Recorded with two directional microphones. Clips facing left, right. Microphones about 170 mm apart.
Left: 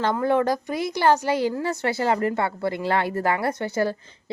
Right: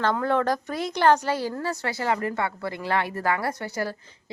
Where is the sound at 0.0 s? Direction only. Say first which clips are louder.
Left 2 dB; 10° left (ahead or behind).